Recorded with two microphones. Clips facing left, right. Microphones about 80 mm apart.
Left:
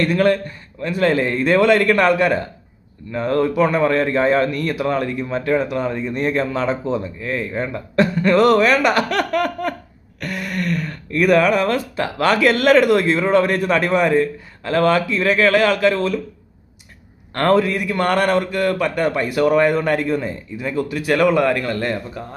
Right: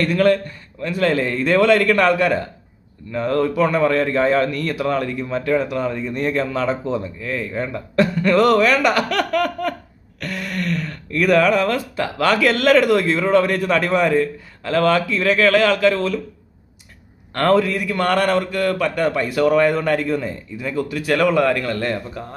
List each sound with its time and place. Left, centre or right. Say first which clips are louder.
0.0 s a man's voice: even; left
10.2 s a sound: left 1 dB; centre
11.1 s a man's voice: left 1 dB; left
17.3 s a man's voice: even; left